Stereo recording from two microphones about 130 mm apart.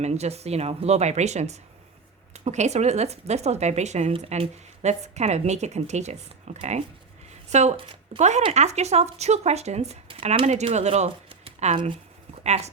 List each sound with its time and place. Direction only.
0.0 s speech: 55° right (ahead or behind)
11.4 s a sound: 55° right (ahead or behind)
12.4 s speech: 55° right (ahead or behind)